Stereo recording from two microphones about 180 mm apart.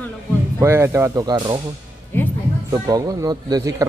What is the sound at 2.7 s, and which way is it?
A man's voice, 20° right (ahead or behind).